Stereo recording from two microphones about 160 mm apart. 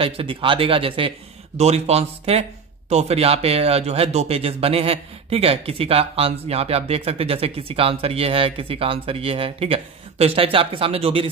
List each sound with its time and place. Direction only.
0.0 s speech: 35° right (ahead or behind)